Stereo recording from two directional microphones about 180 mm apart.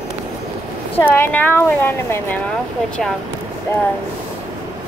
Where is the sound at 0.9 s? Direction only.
10° left (ahead or behind).